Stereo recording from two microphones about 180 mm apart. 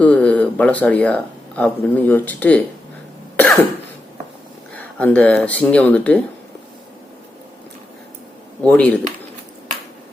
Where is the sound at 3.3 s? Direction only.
5° left (ahead or behind).